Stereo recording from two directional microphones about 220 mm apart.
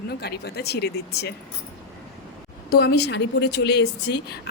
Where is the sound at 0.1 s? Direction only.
45° left (ahead or behind).